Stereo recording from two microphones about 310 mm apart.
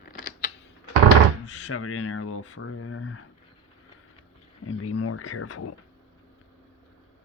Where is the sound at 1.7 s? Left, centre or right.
Left.